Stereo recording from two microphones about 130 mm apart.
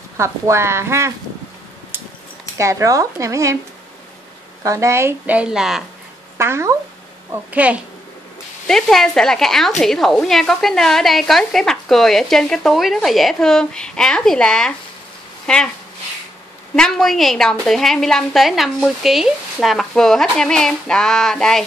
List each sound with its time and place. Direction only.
0.2 s speech: 20° right (ahead or behind)
2.5 s speech: 25° right (ahead or behind)
4.6 s a woman's voice: 20° right (ahead or behind); by 5.9 s 5° right (ahead or behind)
6.3 s speech: 20° right (ahead or behind)
7.5 s a woman's voice: 10° right (ahead or behind)
8.6 s a woman's voice: 5° left (ahead or behind)
16.7 s a woman's voice: 5° left (ahead or behind)